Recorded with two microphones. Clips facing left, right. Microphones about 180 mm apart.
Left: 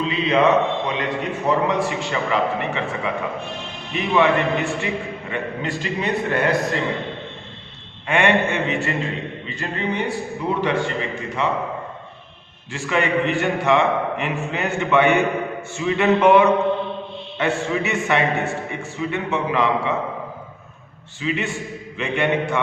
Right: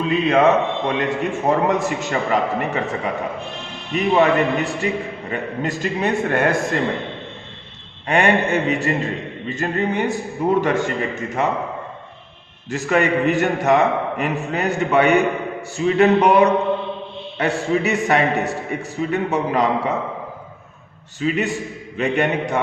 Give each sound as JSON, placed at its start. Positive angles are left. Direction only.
{"t": 0.0, "sound": "a man's voice", "side_deg": -50}
{"t": 8.0, "sound": "a man's voice", "side_deg": -40}
{"t": 12.7, "sound": "a man's voice", "side_deg": -40}
{"t": 21.2, "sound": "a man's voice", "side_deg": -40}